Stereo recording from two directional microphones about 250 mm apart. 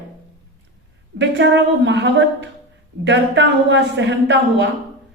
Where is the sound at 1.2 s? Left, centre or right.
Right.